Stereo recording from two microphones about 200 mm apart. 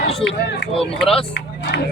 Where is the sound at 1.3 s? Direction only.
60° left (ahead or behind).